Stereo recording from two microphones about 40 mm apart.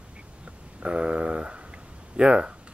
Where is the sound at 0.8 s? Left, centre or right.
Right.